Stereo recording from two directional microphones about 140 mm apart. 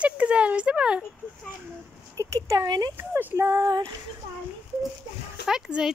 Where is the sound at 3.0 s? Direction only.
15° right (ahead or behind).